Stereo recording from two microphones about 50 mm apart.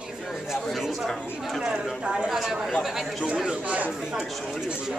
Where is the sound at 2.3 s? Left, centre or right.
Centre.